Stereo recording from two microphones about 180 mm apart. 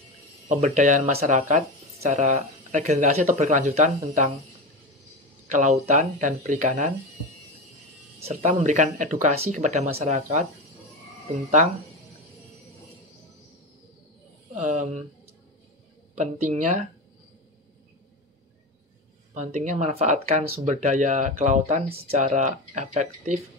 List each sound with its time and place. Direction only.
0.5 s speech: 40° right (ahead or behind)
5.5 s speech: 45° right (ahead or behind)
8.2 s speech: 40° right (ahead or behind)
14.5 s speech: 40° right (ahead or behind)
16.2 s speech: 45° right (ahead or behind)
19.3 s speech: 45° right (ahead or behind)